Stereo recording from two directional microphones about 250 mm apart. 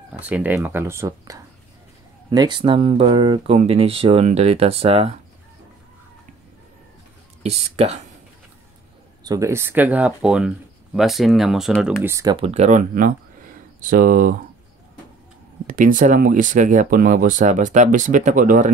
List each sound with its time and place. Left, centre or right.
0.2 s speech: centre; by 5.1 s right
7.7 s speech: right
9.2 s speech: centre; by 14.3 s right
15.6 s speech: right